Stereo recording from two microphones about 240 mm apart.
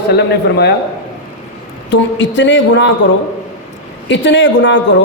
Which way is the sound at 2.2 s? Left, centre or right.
Left.